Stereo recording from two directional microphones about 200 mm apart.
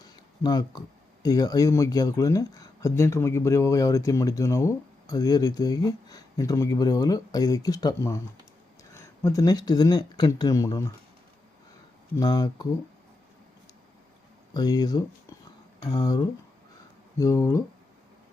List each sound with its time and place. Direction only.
0.0 s a sound: 20° left (ahead or behind)
1.2 s speech: 20° left (ahead or behind)
12.1 s speech: 20° left (ahead or behind)
14.5 s speech: 20° left (ahead or behind)